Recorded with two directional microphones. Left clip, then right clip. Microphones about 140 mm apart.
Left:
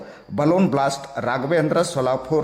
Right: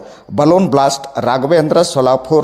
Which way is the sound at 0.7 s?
30° right (ahead or behind).